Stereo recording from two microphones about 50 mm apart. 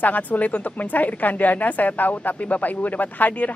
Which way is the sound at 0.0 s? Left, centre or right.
Left.